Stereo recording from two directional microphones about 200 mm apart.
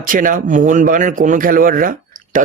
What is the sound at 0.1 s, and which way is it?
Speech, 40° right (ahead or behind).